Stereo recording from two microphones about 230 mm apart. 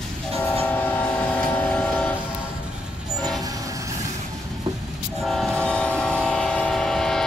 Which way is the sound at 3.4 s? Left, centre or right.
Centre.